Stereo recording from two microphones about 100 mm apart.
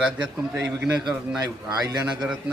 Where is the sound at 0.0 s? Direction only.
10° right (ahead or behind).